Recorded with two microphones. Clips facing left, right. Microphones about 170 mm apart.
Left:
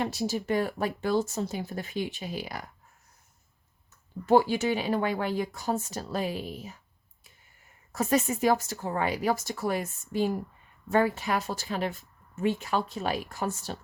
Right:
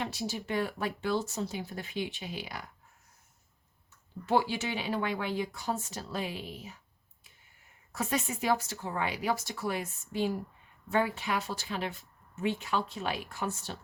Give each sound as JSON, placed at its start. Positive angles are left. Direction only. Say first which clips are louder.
{"t": 0.0, "sound": "speech", "louder": "left 6 dB", "side_deg": 45}
{"t": 4.3, "sound": "speech", "louder": "left 6 dB", "side_deg": 45}
{"t": 7.9, "sound": "speech", "louder": "left 7 dB", "side_deg": 45}